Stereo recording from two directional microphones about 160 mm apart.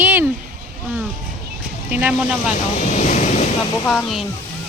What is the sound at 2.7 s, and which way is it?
Waves, 45° left (ahead or behind).